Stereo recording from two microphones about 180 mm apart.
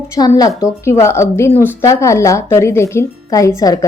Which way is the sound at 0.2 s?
20° left (ahead or behind).